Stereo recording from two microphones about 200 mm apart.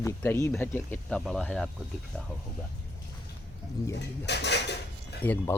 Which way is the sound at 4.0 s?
60° left (ahead or behind).